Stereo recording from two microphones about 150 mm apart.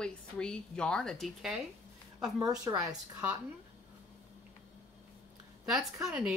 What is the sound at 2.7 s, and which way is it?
Speech, 20° right (ahead or behind).